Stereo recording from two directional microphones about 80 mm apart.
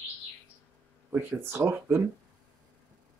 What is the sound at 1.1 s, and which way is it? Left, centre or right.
Speech, right.